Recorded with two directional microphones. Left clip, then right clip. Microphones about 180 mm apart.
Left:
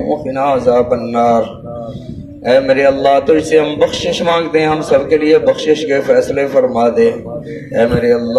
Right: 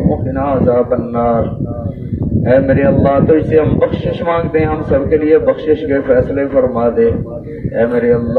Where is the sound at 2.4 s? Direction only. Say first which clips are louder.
Left 2 dB; 45° left (ahead or behind).